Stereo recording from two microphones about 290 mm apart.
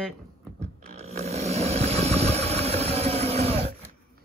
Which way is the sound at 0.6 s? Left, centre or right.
Right.